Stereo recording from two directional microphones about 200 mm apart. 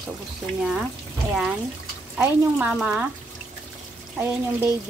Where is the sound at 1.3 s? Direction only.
Centre (ahead or behind).